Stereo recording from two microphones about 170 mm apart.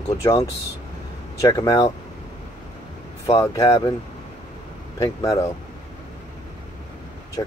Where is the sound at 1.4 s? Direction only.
20° left (ahead or behind).